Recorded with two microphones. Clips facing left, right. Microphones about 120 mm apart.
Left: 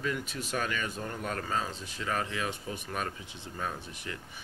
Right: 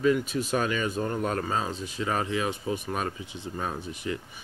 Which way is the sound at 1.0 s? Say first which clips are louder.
Right 8 dB; 40° right (ahead or behind).